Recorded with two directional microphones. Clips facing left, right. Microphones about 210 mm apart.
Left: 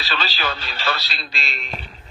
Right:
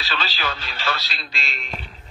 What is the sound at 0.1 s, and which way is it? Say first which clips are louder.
Speech: left 2 dB; 35° left (ahead or behind).